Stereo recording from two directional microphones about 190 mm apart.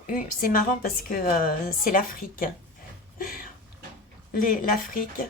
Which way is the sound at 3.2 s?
45° left (ahead or behind).